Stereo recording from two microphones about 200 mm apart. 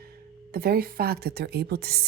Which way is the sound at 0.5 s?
50° right (ahead or behind).